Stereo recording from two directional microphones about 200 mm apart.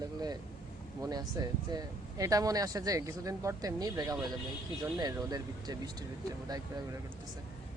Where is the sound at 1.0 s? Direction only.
20° right (ahead or behind).